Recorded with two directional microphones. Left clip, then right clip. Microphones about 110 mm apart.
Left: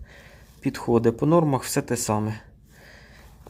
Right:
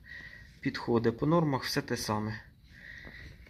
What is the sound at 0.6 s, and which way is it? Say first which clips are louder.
Speech: left 8 dB; 30° left (ahead or behind).